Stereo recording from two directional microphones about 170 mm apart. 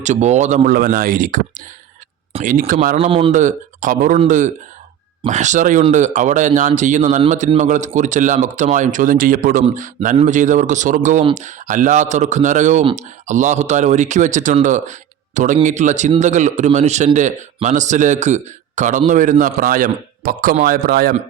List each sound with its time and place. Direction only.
0.0 s a man's voice: 45° right (ahead or behind)
3.0 s speech: 30° right (ahead or behind)
3.3 s a man's voice: 45° right (ahead or behind)